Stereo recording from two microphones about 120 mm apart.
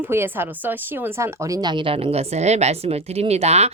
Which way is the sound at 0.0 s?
20° right (ahead or behind).